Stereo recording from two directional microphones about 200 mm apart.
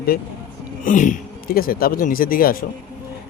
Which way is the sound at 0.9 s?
40° left (ahead or behind).